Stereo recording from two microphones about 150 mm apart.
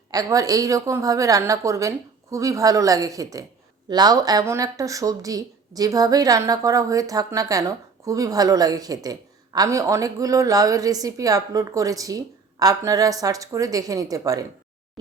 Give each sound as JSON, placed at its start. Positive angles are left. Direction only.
{"t": 0.1, "sound": "speech", "side_deg": -25}